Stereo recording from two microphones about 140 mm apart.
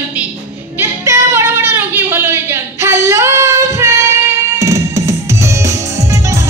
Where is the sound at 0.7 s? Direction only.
20° right (ahead or behind).